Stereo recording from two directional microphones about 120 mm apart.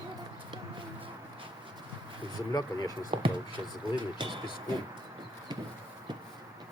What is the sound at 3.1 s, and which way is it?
Speech, 45° right (ahead or behind).